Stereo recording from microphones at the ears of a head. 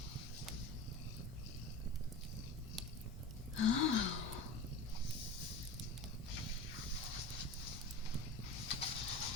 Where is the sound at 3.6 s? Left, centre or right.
Left.